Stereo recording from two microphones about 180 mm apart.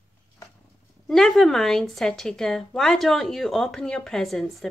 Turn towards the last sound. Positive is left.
turn(degrees=0)  # may be behind; listen again after turning